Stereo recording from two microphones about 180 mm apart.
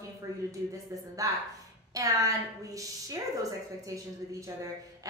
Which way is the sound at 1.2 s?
20° right (ahead or behind).